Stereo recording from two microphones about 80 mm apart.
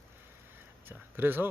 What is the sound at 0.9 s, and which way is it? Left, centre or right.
Speech, right.